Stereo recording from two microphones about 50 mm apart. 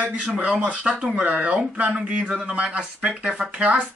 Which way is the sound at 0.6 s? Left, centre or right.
Right.